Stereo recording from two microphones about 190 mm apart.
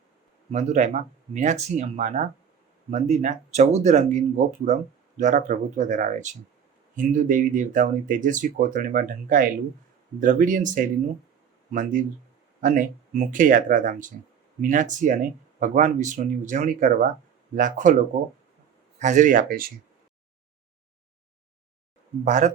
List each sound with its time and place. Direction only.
0.5 s speech: 35° right (ahead or behind)
18.9 s speech: 40° right (ahead or behind)
22.2 s speech: 40° right (ahead or behind)